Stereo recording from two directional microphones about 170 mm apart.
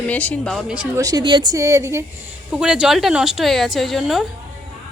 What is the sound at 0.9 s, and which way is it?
A woman's voice, 20° right (ahead or behind).